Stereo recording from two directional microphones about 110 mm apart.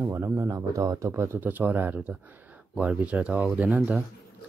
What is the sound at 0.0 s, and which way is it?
Speech, 25° right (ahead or behind).